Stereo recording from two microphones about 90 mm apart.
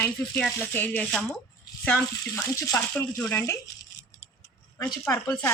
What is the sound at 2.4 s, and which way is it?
Speech, 40° left (ahead or behind).